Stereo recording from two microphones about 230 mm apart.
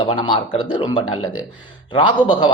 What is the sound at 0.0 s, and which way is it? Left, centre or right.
Speech, left.